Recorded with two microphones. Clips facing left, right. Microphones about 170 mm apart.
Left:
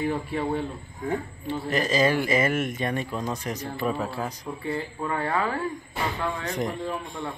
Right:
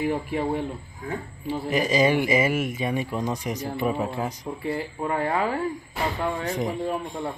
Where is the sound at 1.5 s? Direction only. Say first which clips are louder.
Right 2 dB; 10° right (ahead or behind); by 6.5 s 25° right (ahead or behind).